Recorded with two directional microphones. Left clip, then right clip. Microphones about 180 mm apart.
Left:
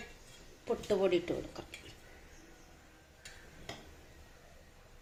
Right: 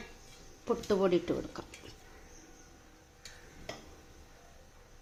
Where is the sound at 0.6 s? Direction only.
50° right (ahead or behind).